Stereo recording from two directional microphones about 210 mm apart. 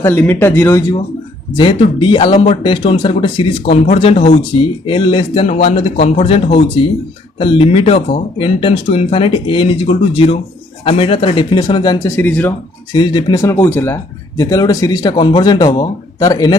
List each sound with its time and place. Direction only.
0.0 s speech: 10° left (ahead or behind)
12.9 s speech: 20° left (ahead or behind)